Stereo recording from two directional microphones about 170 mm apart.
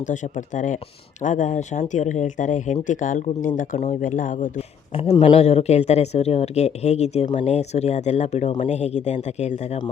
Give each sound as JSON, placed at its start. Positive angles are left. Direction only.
{"t": 0.0, "sound": "speech", "side_deg": 45}
{"t": 4.9, "sound": "speech", "side_deg": 35}